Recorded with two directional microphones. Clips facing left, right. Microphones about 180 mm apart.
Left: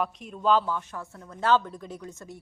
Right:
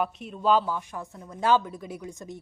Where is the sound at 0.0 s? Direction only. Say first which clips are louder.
Right 1 dB; 5° right (ahead or behind).